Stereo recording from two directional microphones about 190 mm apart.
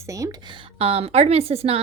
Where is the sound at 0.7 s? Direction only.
30° right (ahead or behind).